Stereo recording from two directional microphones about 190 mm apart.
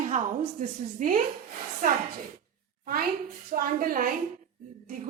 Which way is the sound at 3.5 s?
50° right (ahead or behind).